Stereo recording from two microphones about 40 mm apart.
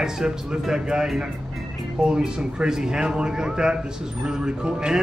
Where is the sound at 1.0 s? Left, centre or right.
Centre.